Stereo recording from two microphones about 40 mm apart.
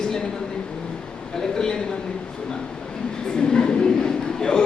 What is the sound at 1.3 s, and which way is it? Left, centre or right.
Speech, centre.